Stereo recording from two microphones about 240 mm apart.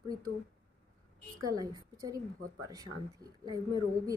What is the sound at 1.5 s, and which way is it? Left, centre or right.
Speech, centre.